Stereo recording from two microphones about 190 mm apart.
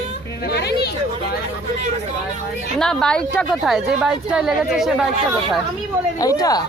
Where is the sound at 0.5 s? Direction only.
60° left (ahead or behind).